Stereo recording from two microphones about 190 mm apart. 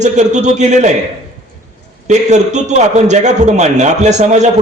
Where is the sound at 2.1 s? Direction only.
40° right (ahead or behind).